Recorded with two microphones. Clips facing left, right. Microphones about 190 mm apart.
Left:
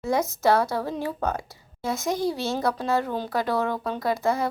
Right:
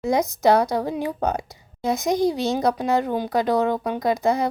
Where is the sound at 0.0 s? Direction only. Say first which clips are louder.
Right 4 dB; 15° right (ahead or behind).